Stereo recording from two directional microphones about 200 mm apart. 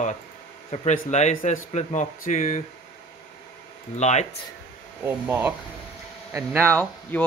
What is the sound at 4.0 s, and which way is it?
Speech, 35° left (ahead or behind).